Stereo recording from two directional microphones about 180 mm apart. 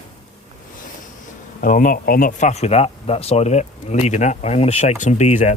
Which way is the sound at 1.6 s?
50° left (ahead or behind).